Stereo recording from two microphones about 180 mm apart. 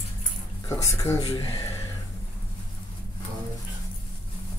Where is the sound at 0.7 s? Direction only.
15° left (ahead or behind).